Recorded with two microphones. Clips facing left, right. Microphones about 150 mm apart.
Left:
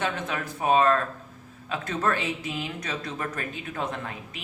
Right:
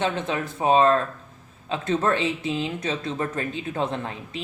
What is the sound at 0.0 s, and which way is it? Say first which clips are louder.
Speech: right 4 dB; 25° right (ahead or behind).